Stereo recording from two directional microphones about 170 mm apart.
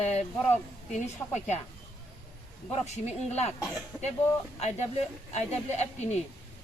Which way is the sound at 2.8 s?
40° left (ahead or behind).